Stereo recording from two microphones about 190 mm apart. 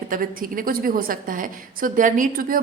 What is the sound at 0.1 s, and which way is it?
A woman's voice, 45° right (ahead or behind).